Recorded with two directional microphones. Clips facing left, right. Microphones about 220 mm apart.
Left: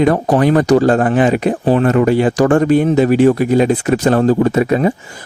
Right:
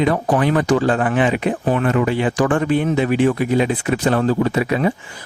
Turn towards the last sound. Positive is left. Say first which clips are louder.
# left 5 dB
turn(degrees=40)  # may be behind; listen again after turning